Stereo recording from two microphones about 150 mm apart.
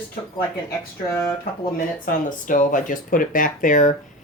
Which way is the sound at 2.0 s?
60° left (ahead or behind).